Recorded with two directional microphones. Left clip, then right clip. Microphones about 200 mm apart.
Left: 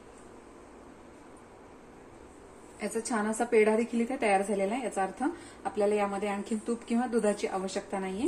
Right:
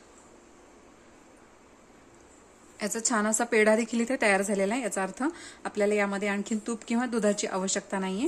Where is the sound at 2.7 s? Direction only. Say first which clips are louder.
Right 3 dB; 55° right (ahead or behind).